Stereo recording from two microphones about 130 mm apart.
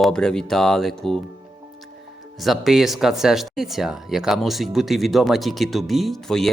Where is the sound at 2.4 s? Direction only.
Centre (ahead or behind).